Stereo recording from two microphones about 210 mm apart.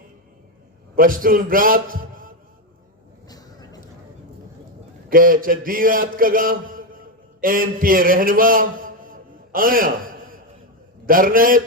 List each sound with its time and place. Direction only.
0.9 s a man's voice: 40° right (ahead or behind)
3.2 s a sound: 20° left (ahead or behind)
5.0 s a man's voice: 40° right (ahead or behind)